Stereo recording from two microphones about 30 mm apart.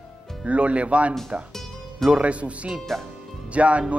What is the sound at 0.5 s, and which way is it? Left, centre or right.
Speech, right.